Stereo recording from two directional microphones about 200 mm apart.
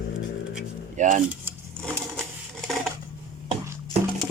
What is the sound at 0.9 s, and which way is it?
Speech, 40° right (ahead or behind).